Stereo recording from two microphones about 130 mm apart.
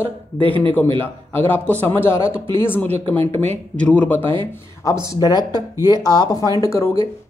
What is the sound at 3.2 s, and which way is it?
Speech, 55° right (ahead or behind).